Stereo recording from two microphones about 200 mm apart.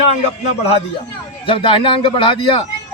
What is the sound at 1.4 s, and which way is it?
A man's voice, 25° left (ahead or behind).